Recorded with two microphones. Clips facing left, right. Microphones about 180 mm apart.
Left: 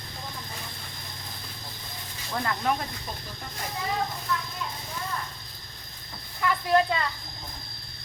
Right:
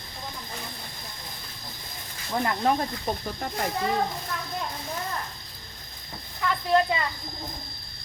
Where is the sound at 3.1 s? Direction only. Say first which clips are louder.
Right 9 dB; 50° right (ahead or behind).